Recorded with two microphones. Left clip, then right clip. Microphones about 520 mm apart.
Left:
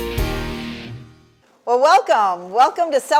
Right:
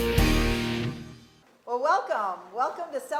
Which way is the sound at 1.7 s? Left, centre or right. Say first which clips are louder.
Left 12 dB; left.